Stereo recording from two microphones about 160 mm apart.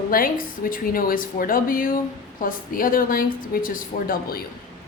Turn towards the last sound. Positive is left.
turn(degrees=60)  # may be behind; listen again after turning